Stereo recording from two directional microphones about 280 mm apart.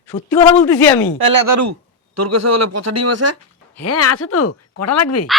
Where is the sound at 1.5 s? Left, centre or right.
Right.